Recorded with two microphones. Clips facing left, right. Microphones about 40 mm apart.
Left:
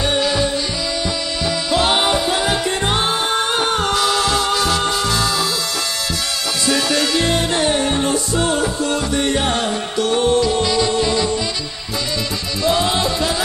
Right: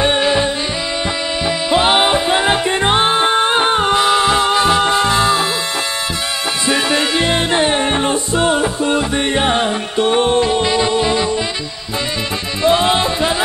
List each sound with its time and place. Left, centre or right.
0.0 s music: right
1.7 s music: right
6.7 s music: right
12.6 s music: right